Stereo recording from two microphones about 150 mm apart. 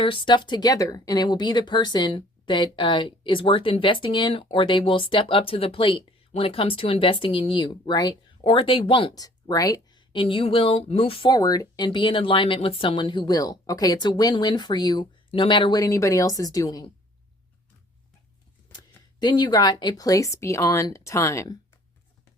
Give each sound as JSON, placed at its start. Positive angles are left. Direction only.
{"t": 0.0, "sound": "speech", "side_deg": 35}
{"t": 18.7, "sound": "speech", "side_deg": 25}